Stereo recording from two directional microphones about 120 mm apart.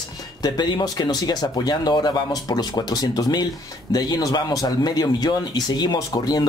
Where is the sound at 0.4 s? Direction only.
35° left (ahead or behind).